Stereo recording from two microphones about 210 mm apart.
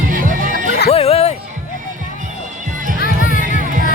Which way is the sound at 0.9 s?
30° left (ahead or behind).